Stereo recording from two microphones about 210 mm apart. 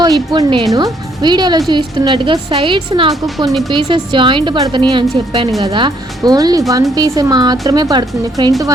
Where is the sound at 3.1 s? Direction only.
Centre (ahead or behind).